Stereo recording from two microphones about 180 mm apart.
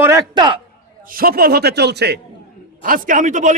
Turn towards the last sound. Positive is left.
turn(degrees=-45)  # may be behind; listen again after turning